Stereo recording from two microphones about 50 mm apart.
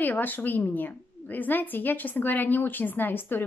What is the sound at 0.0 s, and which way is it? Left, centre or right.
A woman's voice, left.